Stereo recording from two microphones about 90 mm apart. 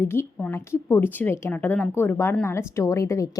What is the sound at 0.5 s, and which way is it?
A woman's voice, 30° left (ahead or behind).